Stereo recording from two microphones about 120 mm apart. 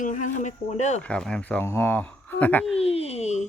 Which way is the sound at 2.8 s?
55° left (ahead or behind).